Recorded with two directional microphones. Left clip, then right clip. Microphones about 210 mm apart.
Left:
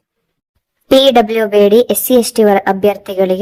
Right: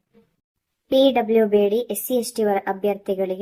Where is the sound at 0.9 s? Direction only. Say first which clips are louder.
Left 8 dB; 40° left (ahead or behind).